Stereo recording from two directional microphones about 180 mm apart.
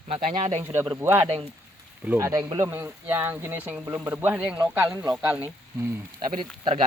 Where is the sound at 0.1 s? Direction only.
35° right (ahead or behind).